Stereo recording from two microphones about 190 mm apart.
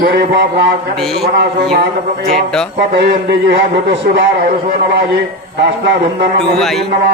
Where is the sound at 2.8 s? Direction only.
60° right (ahead or behind).